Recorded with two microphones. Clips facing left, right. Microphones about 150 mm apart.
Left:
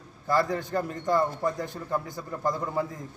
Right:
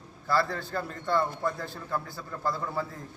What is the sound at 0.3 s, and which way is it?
A man's voice, 15° left (ahead or behind).